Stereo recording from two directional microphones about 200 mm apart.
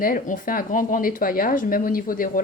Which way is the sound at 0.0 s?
45° left (ahead or behind).